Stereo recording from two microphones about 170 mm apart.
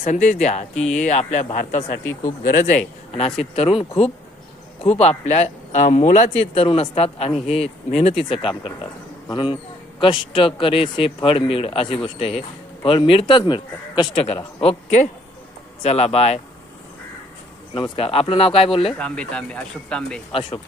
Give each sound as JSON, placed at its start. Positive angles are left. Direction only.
{"t": 0.0, "sound": "speech", "side_deg": 45}
{"t": 0.7, "sound": "speech", "side_deg": 5}
{"t": 0.9, "sound": "speech", "side_deg": 45}
{"t": 2.4, "sound": "speech", "side_deg": 55}
{"t": 3.2, "sound": "a man's voice", "side_deg": 35}
{"t": 17.7, "sound": "a man's voice", "side_deg": 30}
{"t": 18.9, "sound": "speech", "side_deg": 5}